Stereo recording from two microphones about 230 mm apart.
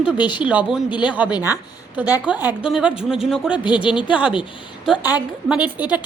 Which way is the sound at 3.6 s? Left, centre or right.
Left.